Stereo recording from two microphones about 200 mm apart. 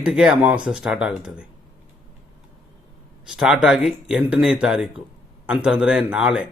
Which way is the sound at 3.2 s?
5° right (ahead or behind).